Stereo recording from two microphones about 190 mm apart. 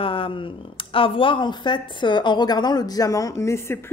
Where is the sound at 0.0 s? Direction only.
30° left (ahead or behind).